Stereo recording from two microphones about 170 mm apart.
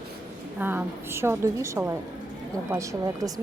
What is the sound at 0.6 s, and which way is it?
A woman's voice, 10° right (ahead or behind).